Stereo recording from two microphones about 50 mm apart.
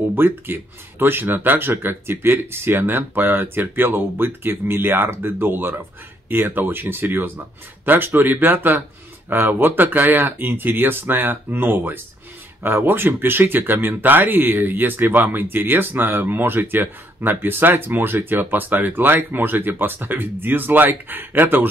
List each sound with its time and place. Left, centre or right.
0.1 s speech: right